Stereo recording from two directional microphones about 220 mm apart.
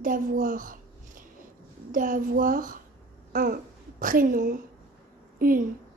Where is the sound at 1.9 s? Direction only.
40° right (ahead or behind).